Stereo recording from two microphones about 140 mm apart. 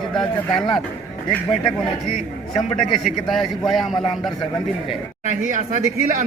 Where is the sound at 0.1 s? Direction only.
5° left (ahead or behind).